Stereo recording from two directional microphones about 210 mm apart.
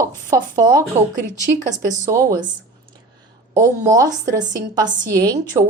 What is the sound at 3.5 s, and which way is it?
A woman's voice, 15° right (ahead or behind).